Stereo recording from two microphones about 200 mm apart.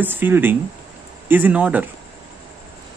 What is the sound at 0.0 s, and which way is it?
Speech, 10° right (ahead or behind).